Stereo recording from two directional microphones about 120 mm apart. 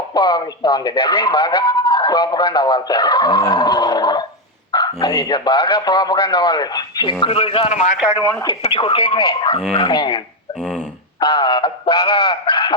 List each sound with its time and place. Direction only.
0.1 s speech: 35° left (ahead or behind)
7.7 s a man's voice: 75° left (ahead or behind)
8.2 s speech: 35° left (ahead or behind)
8.6 s speech: 55° left (ahead or behind)
10.6 s speech: 10° left (ahead or behind)
11.2 s speech: 40° left (ahead or behind)